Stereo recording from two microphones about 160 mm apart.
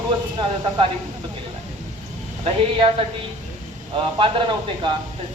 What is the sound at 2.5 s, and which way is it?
Speech, 35° right (ahead or behind).